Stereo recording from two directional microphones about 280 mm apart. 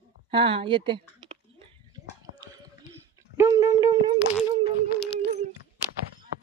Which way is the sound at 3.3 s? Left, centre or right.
Centre.